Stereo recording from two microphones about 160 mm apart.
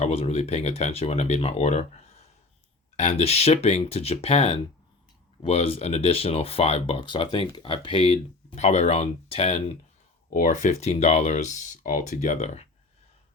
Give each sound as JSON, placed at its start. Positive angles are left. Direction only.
{"t": 0.0, "sound": "speech", "side_deg": 40}
{"t": 8.5, "sound": "speech", "side_deg": 45}
{"t": 10.2, "sound": "speech", "side_deg": 60}